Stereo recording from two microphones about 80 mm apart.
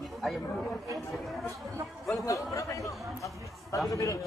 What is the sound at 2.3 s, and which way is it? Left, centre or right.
A man's voice, left.